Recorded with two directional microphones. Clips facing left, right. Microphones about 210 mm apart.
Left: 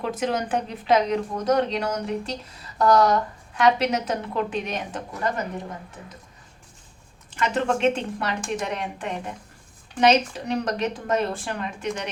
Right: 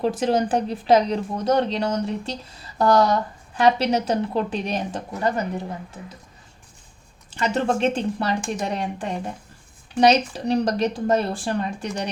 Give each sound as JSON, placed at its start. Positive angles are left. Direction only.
{"t": 0.0, "sound": "speech", "side_deg": -30}
{"t": 7.3, "sound": "speech", "side_deg": -35}